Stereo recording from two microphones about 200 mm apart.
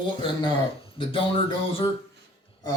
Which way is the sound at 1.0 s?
25° left (ahead or behind).